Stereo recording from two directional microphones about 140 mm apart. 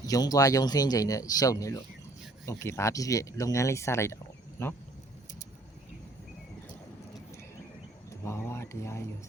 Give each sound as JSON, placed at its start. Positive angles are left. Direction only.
{"t": 0.0, "sound": "speech", "side_deg": 25}
{"t": 8.2, "sound": "speech", "side_deg": 20}